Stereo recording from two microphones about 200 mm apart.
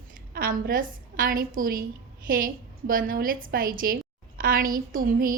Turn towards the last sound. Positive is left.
turn(degrees=-45)  # may be behind; listen again after turning